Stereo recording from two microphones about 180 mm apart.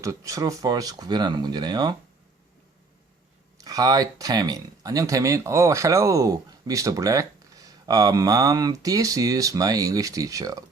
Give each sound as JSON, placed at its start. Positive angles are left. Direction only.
{"t": 0.0, "sound": "speech", "side_deg": -20}
{"t": 3.6, "sound": "speech", "side_deg": -20}